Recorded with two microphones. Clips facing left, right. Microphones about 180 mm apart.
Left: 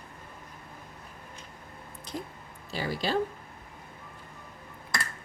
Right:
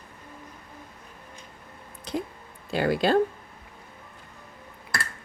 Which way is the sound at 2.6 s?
55° right (ahead or behind).